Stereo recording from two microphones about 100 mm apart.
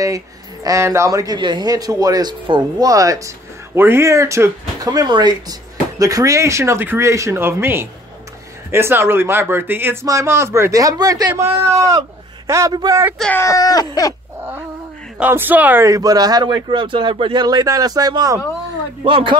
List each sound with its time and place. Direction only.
0.7 s speech: 30° right (ahead or behind)
4.8 s a man's voice: 45° right (ahead or behind)
13.5 s speech: 40° left (ahead or behind)
15.1 s speech: 20° right (ahead or behind)
15.8 s speech: 35° right (ahead or behind)
19.0 s speech: 60° right (ahead or behind)